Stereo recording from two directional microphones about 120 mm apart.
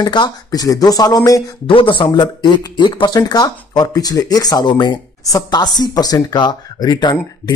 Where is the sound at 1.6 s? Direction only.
45° left (ahead or behind).